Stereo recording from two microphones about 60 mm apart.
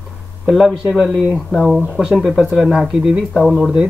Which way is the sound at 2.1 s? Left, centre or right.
Centre.